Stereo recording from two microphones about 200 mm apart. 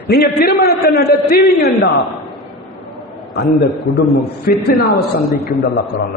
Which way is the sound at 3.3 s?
55° left (ahead or behind).